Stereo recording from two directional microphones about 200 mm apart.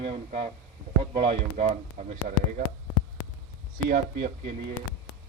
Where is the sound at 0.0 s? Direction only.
30° right (ahead or behind).